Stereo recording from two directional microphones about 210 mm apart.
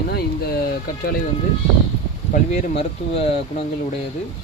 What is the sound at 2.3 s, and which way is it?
Speech, 30° left (ahead or behind).